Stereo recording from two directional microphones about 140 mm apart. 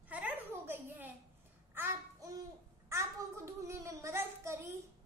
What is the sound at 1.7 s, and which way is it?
Babbling, 20° right (ahead or behind).